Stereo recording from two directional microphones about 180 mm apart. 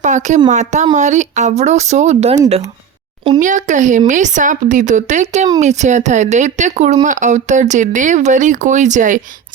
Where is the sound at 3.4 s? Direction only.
45° right (ahead or behind).